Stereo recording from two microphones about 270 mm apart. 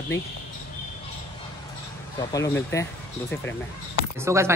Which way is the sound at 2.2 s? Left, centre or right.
Centre.